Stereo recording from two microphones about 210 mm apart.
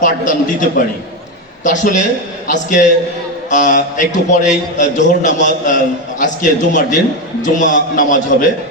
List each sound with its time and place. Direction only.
0.0 s a man's voice: 40° left (ahead or behind)
1.6 s a man's voice: 35° left (ahead or behind)